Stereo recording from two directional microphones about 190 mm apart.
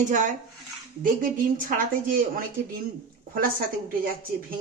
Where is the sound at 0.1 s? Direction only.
40° right (ahead or behind).